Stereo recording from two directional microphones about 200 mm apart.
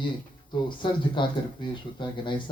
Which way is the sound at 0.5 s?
25° left (ahead or behind).